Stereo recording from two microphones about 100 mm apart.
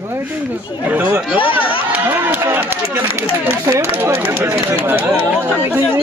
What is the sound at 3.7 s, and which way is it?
Speech, 30° right (ahead or behind).